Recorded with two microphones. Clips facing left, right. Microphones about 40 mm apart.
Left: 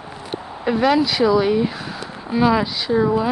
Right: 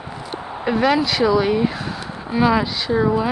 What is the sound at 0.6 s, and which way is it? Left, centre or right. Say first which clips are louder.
Speech: left 1 dB; centre.